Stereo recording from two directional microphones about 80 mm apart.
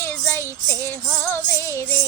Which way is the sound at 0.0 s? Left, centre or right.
Left.